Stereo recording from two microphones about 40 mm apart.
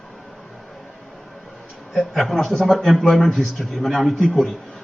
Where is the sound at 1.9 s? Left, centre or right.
Centre.